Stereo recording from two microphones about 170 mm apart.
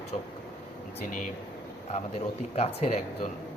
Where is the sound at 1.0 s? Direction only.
45° left (ahead or behind).